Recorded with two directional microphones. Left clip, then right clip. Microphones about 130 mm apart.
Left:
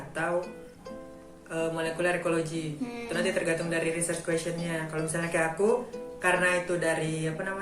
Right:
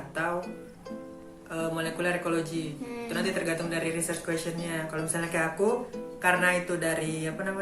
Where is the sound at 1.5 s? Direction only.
35° right (ahead or behind).